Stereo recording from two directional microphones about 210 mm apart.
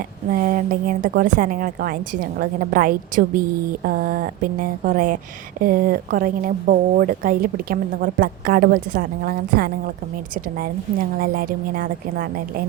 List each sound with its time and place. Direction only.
0.3 s a woman's voice: 40° right (ahead or behind)
11.2 s speech: 45° right (ahead or behind)